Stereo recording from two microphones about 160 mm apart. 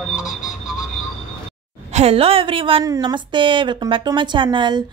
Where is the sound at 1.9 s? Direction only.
40° right (ahead or behind).